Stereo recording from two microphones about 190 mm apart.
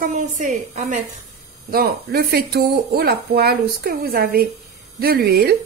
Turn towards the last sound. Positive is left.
turn(degrees=-55)  # may be behind; listen again after turning